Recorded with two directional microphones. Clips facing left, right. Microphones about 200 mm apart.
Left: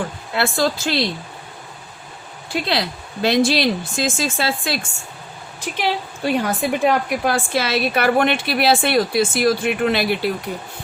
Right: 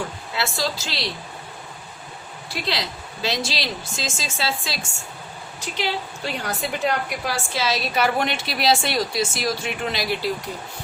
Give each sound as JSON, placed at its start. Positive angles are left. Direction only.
{"t": 0.3, "sound": "a woman's voice", "side_deg": 55}
{"t": 2.6, "sound": "a woman's voice", "side_deg": 55}